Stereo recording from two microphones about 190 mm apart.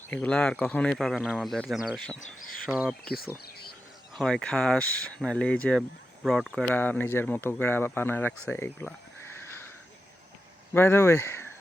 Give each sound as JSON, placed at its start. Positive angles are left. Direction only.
{"t": 0.1, "sound": "speech", "side_deg": 5}
{"t": 2.2, "sound": "speech", "side_deg": 50}
{"t": 2.6, "sound": "speech", "side_deg": -5}
{"t": 4.2, "sound": "speech", "side_deg": 5}
{"t": 8.4, "sound": "a sound", "side_deg": 10}
{"t": 10.8, "sound": "speech", "side_deg": 15}